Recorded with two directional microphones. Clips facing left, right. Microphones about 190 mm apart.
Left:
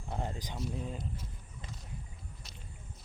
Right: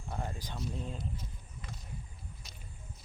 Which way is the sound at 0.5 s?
5° left (ahead or behind).